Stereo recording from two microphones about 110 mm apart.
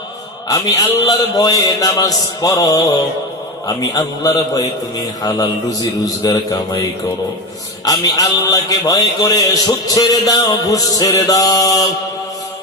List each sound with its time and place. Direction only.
0.4 s speech: 35° left (ahead or behind)
7.9 s speech: 35° left (ahead or behind)